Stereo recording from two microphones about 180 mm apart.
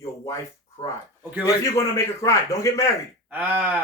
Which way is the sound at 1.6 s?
15° left (ahead or behind).